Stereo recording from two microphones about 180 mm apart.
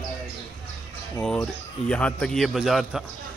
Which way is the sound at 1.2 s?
5° left (ahead or behind).